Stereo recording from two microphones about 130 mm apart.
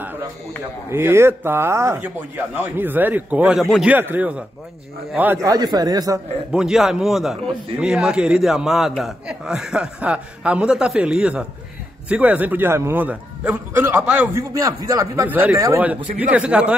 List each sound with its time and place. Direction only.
0.8 s a man's voice: 20° right (ahead or behind)
5.4 s speech: 30° right (ahead or behind)
6.5 s a man's voice: 5° right (ahead or behind)
14.3 s speech: 25° right (ahead or behind)
15.2 s a man's voice: 15° right (ahead or behind)
16.2 s a man's voice: 10° right (ahead or behind)